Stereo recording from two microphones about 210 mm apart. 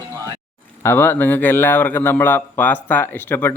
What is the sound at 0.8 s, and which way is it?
A man's voice, 10° left (ahead or behind).